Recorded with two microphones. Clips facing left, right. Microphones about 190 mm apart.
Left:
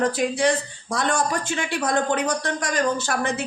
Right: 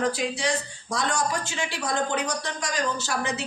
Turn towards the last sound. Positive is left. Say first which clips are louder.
# left 4 dB
turn(degrees=55)  # may be behind; listen again after turning